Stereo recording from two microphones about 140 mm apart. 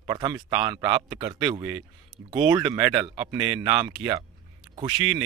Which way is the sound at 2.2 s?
20° right (ahead or behind).